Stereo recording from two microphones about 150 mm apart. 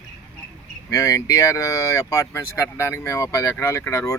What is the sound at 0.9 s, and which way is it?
Speech, 20° left (ahead or behind).